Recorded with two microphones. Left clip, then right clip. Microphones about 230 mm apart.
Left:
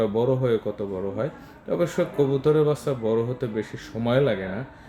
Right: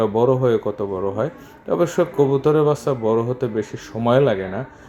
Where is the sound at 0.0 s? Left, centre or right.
Centre.